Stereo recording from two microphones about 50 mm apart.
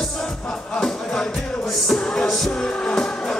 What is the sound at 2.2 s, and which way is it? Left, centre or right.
Music, centre.